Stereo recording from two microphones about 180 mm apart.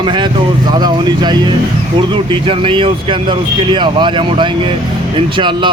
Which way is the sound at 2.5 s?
30° right (ahead or behind).